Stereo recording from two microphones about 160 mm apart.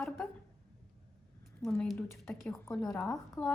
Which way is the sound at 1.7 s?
10° left (ahead or behind).